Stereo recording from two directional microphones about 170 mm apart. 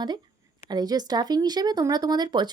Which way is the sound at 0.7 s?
25° right (ahead or behind).